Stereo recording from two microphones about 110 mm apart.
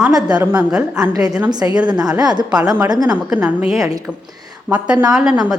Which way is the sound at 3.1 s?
15° right (ahead or behind).